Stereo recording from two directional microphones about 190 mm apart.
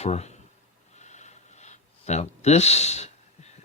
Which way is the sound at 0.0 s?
35° left (ahead or behind).